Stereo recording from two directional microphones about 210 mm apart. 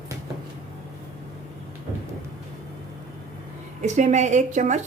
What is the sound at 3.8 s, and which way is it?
A woman's voice, 35° right (ahead or behind).